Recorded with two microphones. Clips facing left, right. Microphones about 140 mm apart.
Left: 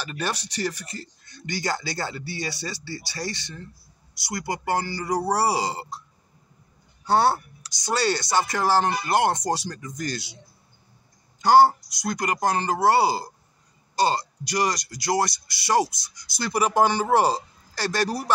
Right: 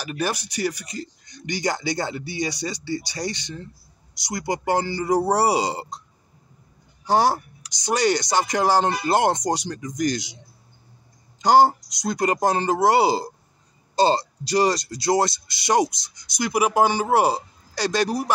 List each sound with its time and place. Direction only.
0.0 s speech: 10° right (ahead or behind)
7.1 s speech: 15° right (ahead or behind)
11.4 s speech: 20° right (ahead or behind)